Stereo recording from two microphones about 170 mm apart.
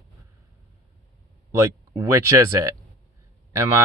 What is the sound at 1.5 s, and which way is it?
Speech, 20° right (ahead or behind).